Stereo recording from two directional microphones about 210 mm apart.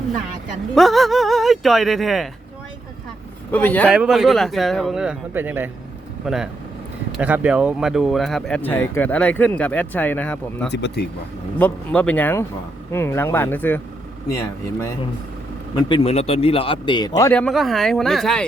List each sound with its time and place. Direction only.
0.8 s speech: centre (ahead or behind)
3.5 s speech: 10° left (ahead or behind)
3.9 s speech: 5° right (ahead or behind)
10.7 s speech: 55° left (ahead or behind)
11.6 s speech: 5° left (ahead or behind)
15.7 s speech: 25° left (ahead or behind); by 18.4 s centre (ahead or behind)